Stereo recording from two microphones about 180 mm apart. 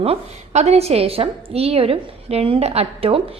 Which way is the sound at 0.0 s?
35° right (ahead or behind).